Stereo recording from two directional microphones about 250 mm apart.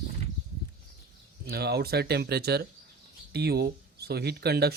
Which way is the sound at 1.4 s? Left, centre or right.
Right.